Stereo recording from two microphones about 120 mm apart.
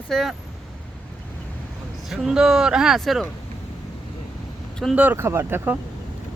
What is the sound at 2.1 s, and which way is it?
Speech, 5° right (ahead or behind).